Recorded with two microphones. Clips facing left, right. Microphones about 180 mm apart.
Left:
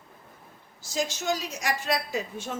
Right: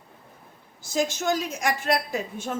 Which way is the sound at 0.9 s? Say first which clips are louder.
Right 4 dB; 50° right (ahead or behind).